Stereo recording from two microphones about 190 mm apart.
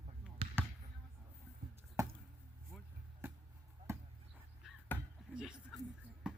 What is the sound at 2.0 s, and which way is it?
Chop, 15° right (ahead or behind).